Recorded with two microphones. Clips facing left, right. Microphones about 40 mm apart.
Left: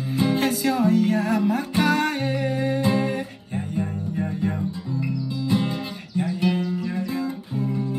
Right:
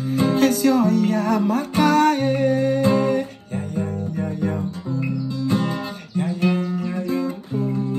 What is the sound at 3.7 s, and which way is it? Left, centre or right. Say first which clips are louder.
Music: right 1 dB; left.